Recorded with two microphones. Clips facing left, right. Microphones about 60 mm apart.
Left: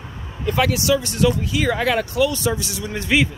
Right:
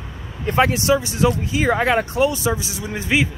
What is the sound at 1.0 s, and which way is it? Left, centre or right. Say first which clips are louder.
Speech: even; centre.